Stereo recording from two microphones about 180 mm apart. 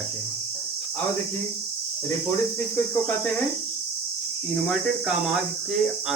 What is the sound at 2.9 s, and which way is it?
Cricket, 10° left (ahead or behind).